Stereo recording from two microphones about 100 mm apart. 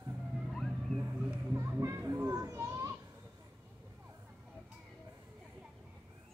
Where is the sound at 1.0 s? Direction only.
25° right (ahead or behind).